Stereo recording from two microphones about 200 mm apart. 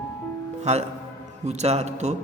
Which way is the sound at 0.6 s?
35° right (ahead or behind).